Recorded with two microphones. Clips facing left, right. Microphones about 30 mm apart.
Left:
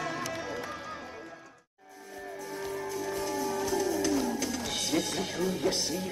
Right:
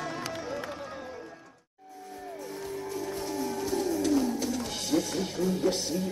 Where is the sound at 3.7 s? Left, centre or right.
Left.